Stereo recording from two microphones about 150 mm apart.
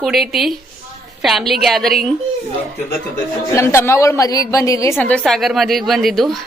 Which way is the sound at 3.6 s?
15° left (ahead or behind).